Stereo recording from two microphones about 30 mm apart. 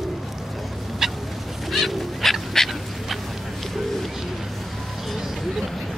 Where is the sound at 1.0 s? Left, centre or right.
Centre.